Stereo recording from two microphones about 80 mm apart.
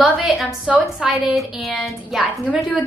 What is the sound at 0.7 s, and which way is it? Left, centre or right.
Speech, centre.